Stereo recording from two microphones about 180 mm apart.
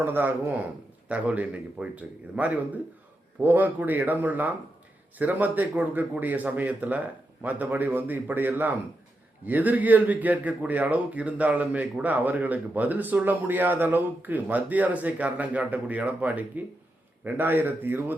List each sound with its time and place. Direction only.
0.0 s a man's voice: 10° right (ahead or behind)